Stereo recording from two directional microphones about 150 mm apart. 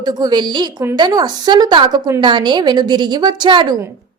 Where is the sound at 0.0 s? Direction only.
30° right (ahead or behind).